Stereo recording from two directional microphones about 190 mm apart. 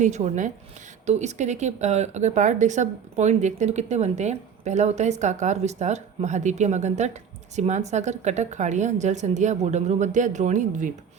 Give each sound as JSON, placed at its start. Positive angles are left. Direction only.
{"t": 0.0, "sound": "speech", "side_deg": -40}